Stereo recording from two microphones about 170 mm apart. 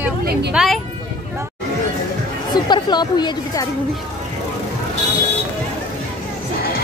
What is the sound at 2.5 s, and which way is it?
Speech, 25° left (ahead or behind).